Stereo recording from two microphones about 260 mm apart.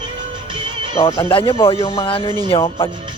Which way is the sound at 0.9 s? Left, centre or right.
Centre.